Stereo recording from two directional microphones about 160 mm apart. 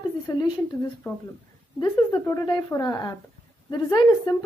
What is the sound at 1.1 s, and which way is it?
A woman's voice, 15° left (ahead or behind).